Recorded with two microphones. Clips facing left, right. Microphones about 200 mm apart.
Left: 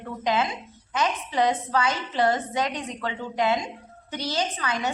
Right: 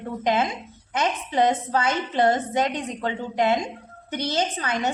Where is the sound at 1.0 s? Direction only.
25° right (ahead or behind).